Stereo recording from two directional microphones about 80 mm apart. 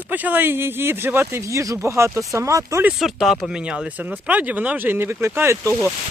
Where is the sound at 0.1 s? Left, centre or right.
Right.